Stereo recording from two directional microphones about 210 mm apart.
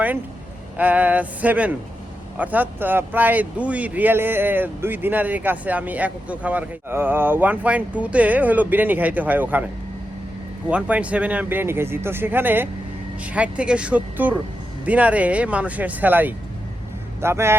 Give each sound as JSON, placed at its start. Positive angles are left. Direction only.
{"t": 0.8, "sound": "speech", "side_deg": -5}
{"t": 10.7, "sound": "speech", "side_deg": -5}